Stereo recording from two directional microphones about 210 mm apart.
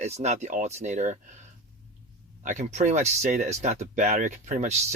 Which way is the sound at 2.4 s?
35° right (ahead or behind).